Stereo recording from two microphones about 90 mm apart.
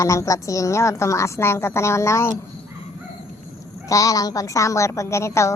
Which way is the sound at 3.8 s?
40° left (ahead or behind).